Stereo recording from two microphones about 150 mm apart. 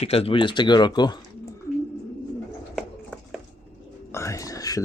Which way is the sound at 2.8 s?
5° right (ahead or behind).